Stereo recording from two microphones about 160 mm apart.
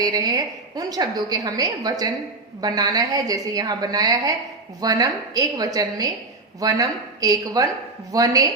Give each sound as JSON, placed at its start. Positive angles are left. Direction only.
{"t": 0.0, "sound": "a woman's voice", "side_deg": -20}